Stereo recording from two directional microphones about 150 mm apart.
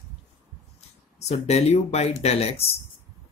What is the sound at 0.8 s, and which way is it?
Speech, 45° left (ahead or behind).